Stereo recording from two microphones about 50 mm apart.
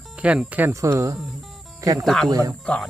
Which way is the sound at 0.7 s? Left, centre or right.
Right.